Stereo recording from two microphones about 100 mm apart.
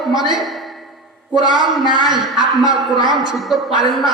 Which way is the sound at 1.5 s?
50° right (ahead or behind).